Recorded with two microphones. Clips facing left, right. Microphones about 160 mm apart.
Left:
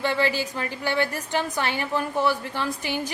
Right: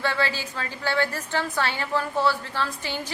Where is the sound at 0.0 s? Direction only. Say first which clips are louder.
Left 3 dB; 15° left (ahead or behind).